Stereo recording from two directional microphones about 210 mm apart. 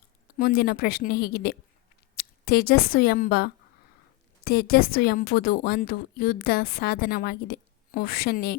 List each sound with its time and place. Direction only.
0.3 s a woman's voice: 45° left (ahead or behind)